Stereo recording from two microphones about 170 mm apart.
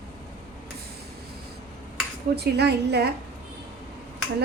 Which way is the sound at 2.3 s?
75° right (ahead or behind).